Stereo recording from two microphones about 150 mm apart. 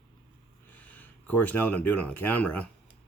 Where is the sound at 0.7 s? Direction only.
10° left (ahead or behind).